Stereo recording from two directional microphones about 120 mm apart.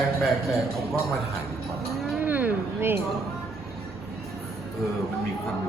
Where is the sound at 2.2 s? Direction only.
15° right (ahead or behind).